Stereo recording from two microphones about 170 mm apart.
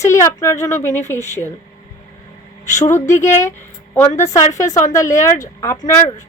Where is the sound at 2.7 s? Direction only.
20° left (ahead or behind).